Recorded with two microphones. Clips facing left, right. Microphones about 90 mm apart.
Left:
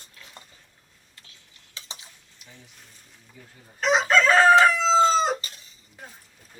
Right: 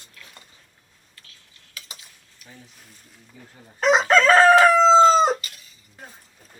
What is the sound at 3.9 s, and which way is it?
Crowing, 45° right (ahead or behind).